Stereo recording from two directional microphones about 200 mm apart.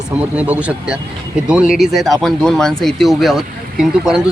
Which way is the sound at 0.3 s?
5° right (ahead or behind).